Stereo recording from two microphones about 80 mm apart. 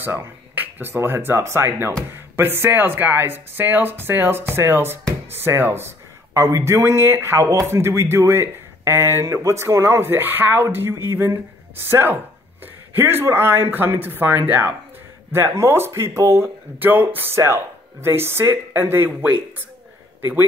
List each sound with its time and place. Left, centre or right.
0.0 s speech: right